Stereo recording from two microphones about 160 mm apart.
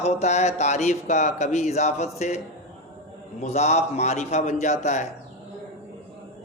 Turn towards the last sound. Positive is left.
turn(degrees=50)  # may be behind; listen again after turning